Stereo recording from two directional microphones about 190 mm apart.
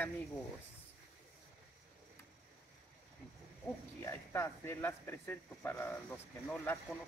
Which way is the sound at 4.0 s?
15° left (ahead or behind).